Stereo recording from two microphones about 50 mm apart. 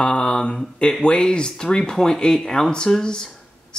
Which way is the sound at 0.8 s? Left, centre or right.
Centre.